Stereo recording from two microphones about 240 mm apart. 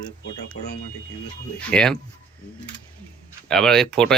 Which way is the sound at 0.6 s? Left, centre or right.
Left.